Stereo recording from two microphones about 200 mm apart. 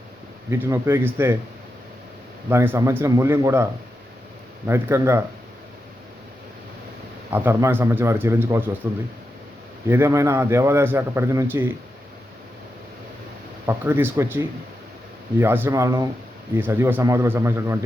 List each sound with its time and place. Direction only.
0.5 s a man's voice: 15° right (ahead or behind)
2.5 s a man's voice: 15° right (ahead or behind)
7.3 s a man's voice: 10° right (ahead or behind)
13.7 s a man's voice: 10° right (ahead or behind)